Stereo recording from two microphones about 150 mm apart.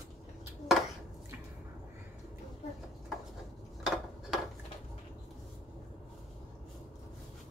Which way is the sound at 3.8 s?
5° right (ahead or behind).